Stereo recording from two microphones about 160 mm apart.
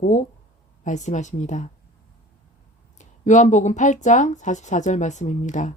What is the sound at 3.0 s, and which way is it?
Speech, 50° left (ahead or behind).